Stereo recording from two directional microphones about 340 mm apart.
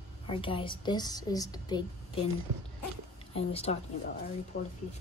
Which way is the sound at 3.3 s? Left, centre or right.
Centre.